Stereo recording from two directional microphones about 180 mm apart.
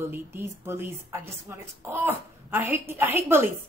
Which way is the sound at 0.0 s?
15° right (ahead or behind).